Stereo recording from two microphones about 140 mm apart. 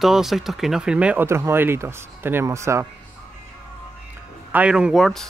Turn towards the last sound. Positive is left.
turn(degrees=0)  # may be behind; listen again after turning